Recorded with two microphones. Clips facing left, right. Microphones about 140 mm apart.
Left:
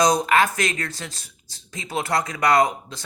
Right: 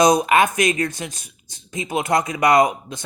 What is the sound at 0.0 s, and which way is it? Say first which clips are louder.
Speech: right 3 dB; 20° right (ahead or behind).